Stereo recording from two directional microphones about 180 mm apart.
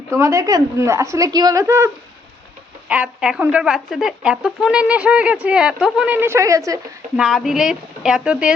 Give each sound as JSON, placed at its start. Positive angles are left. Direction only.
{"t": 0.1, "sound": "a woman's voice", "side_deg": -15}
{"t": 2.9, "sound": "speech", "side_deg": -5}
{"t": 7.2, "sound": "speech", "side_deg": 0}